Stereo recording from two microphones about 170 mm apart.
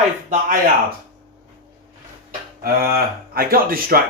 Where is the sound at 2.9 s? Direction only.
60° right (ahead or behind).